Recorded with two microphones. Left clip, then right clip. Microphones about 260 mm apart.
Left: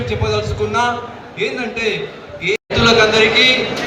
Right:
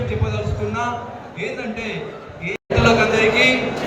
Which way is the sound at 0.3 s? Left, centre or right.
Left.